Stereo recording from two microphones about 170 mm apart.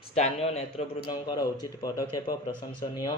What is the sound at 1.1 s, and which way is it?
Speech, 25° left (ahead or behind).